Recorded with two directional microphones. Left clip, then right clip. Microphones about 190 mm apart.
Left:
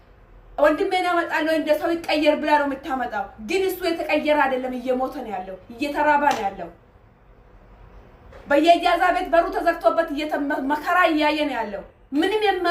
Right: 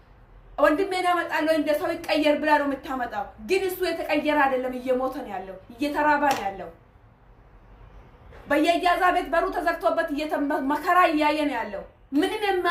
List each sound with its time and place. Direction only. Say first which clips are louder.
0.5 s a woman's voice: left 3 dB; 25° left (ahead or behind)
8.4 s a woman's voice: left 5 dB; 25° left (ahead or behind)